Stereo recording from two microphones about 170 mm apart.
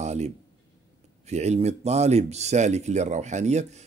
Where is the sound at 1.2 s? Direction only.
40° right (ahead or behind).